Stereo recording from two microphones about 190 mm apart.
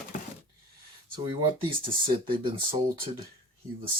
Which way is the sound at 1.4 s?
25° right (ahead or behind).